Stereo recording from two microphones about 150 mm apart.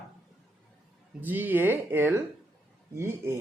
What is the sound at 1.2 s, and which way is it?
Speech, 10° right (ahead or behind).